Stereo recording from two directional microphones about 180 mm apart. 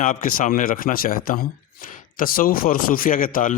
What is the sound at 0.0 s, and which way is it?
A man's voice, 45° left (ahead or behind).